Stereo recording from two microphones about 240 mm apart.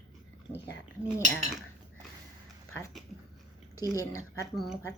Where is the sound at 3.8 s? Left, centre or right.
Centre.